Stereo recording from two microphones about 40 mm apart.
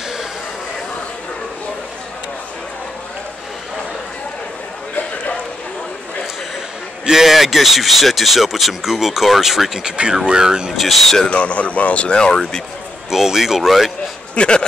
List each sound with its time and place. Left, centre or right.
7.1 s speech: centre
9.8 s speech: right
10.8 s speech: centre
11.2 s speech: left
13.1 s speech: centre
14.3 s a sound: left